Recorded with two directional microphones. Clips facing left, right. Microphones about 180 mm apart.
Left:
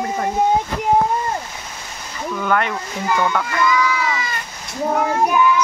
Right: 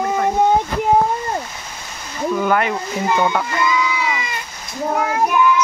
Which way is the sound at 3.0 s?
20° right (ahead or behind).